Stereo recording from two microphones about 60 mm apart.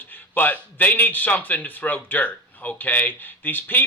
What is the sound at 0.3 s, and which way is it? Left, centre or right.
A man's voice, left.